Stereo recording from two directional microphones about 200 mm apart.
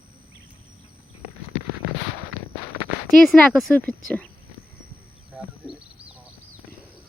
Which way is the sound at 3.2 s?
Centre (ahead or behind).